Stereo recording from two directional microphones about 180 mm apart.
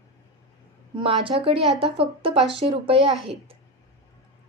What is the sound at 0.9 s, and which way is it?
Speech, 30° right (ahead or behind).